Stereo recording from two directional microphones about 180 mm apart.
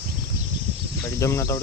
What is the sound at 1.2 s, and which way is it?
Speech, 15° left (ahead or behind).